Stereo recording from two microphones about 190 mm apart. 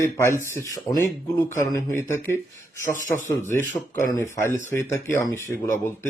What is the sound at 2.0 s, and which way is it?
Speech, 15° left (ahead or behind).